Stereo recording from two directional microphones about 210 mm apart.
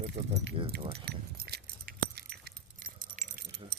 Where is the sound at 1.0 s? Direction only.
50° right (ahead or behind).